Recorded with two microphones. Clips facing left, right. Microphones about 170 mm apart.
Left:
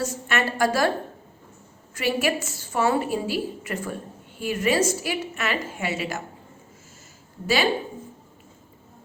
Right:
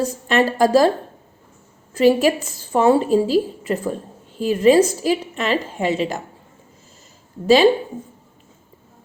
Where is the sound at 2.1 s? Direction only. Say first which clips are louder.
Right 6 dB; 35° right (ahead or behind).